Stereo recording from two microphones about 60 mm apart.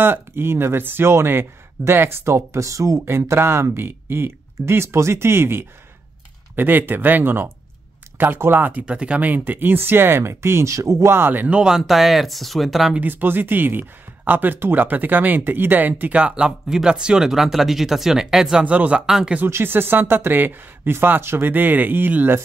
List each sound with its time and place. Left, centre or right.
0.0 s speech: right
3.1 s speech: right
6.5 s speech: right
8.8 s speech: centre
9.3 s speech: right
11.1 s speech: right
11.4 s speech: centre
11.8 s speech: centre
13.0 s speech: right
19.0 s speech: centre
19.4 s speech: right